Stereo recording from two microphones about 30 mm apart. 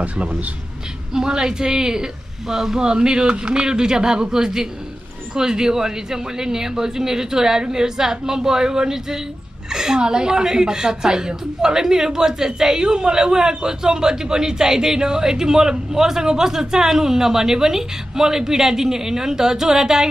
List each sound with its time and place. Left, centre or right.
1.1 s a woman's voice: right